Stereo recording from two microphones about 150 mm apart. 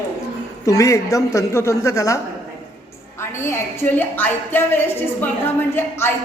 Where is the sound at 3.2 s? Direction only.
15° left (ahead or behind).